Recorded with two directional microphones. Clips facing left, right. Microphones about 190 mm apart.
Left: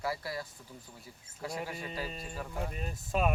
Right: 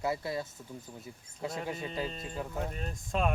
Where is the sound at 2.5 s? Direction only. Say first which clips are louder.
Right 1 dB; 5° left (ahead or behind).